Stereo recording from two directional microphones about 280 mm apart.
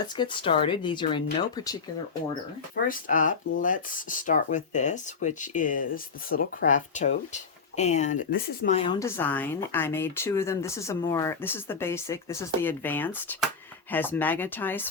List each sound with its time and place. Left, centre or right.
0.2 s speech: centre
2.7 s speech: left; by 14.8 s centre